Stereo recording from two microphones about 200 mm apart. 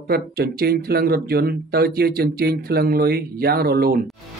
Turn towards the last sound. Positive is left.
turn(degrees=-50)  # may be behind; listen again after turning